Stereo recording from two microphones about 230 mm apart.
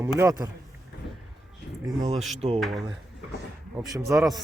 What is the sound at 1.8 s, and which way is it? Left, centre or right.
Speech, centre.